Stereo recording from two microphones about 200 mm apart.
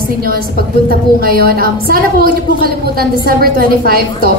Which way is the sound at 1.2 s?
50° right (ahead or behind).